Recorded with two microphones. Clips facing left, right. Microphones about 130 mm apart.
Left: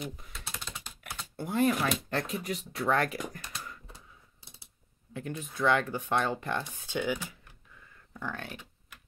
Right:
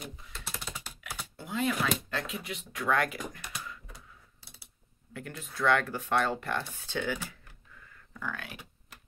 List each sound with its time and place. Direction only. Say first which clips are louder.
0.3 s typing: right 1 dB; 5° right (ahead or behind)
1.4 s speech: left 4 dB; 50° left (ahead or behind)
3.3 s computer keyboard: even; 15° right (ahead or behind)
5.1 s speech: left 4 dB; 20° left (ahead or behind)
8.3 s speech: left 1 dB; 35° left (ahead or behind)